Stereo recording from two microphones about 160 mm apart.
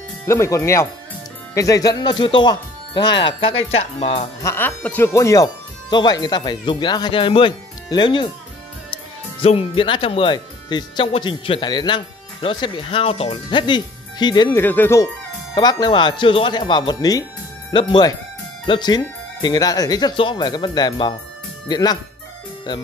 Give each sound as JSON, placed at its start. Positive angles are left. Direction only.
{"t": 0.3, "sound": "speech", "side_deg": 15}
{"t": 4.4, "sound": "speech", "side_deg": 15}
{"t": 14.6, "sound": "speech", "side_deg": 10}
{"t": 15.5, "sound": "speech", "side_deg": 25}